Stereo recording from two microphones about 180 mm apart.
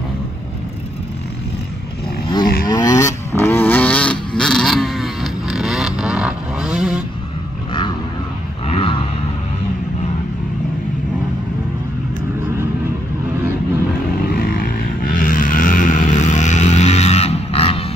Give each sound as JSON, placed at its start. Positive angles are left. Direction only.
{"t": 2.6, "sound": "vehicle", "side_deg": 20}
{"t": 8.6, "sound": "a sound", "side_deg": 35}
{"t": 14.3, "sound": "vehicle", "side_deg": 55}